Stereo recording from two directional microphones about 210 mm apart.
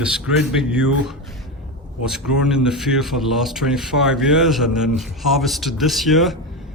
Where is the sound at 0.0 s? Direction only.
5° right (ahead or behind).